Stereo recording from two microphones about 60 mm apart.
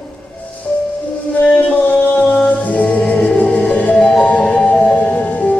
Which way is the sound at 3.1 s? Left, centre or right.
Left.